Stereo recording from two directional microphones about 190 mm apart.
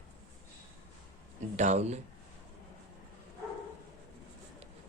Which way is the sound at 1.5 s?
40° right (ahead or behind).